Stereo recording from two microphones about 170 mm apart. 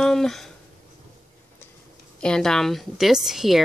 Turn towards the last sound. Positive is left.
turn(degrees=0)  # may be behind; listen again after turning